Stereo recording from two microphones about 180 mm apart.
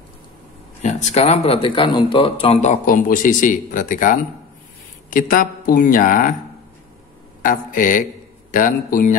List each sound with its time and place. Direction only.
0.8 s speech: 40° left (ahead or behind)
7.4 s speech: 50° left (ahead or behind)